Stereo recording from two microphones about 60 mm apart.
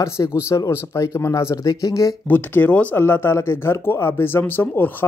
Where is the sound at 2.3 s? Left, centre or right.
Left.